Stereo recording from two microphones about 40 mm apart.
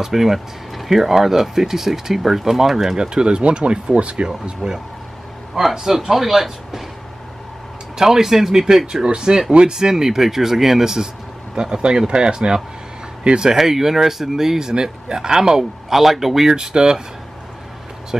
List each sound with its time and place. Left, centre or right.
0.0 s speech: centre; by 4.3 s right
4.6 s a man's voice: centre
8.0 s speech: centre
13.6 s speech: centre
16.7 s speech: centre